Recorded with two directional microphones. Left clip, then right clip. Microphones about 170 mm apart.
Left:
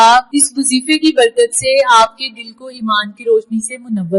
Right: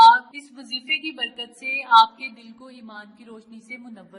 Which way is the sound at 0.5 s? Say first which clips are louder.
Left 8 dB; 30° left (ahead or behind).